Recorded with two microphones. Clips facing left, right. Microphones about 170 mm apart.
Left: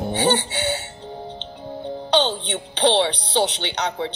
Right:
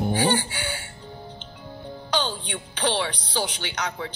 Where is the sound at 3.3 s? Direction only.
25° left (ahead or behind).